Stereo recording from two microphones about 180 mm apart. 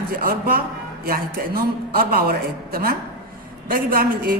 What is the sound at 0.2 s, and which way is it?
Speech, 55° right (ahead or behind).